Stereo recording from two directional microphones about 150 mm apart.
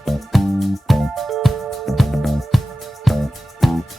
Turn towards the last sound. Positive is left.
turn(degrees=0)  # may be behind; listen again after turning